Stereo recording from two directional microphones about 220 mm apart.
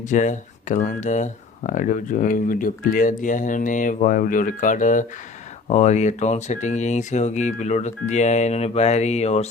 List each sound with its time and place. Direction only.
0.0 s speech: 35° left (ahead or behind)